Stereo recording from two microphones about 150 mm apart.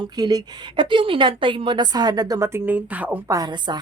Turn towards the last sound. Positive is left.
turn(degrees=-25)  # may be behind; listen again after turning